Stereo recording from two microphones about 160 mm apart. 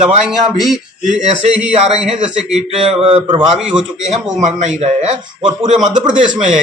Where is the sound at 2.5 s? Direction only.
40° right (ahead or behind).